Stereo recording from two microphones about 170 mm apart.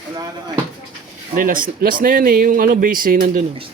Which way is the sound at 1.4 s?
55° right (ahead or behind).